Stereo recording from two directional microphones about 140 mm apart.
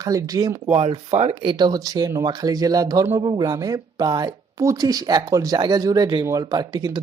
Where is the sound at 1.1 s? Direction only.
50° right (ahead or behind).